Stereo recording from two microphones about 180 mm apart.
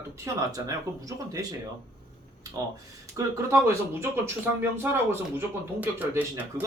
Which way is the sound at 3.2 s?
15° right (ahead or behind).